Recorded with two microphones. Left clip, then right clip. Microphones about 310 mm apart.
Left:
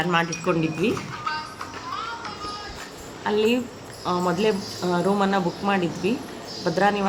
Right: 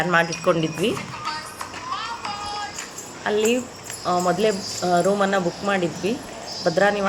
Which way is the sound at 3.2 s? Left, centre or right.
Centre.